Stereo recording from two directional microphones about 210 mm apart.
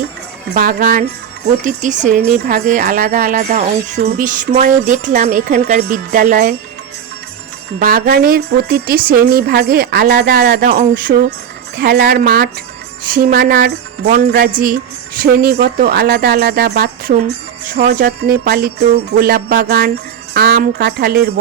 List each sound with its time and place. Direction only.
0.6 s speech: 45° right (ahead or behind)
7.8 s speech: 45° right (ahead or behind)